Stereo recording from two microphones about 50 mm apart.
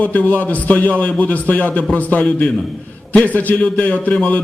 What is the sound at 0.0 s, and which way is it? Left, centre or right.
A man's voice, left.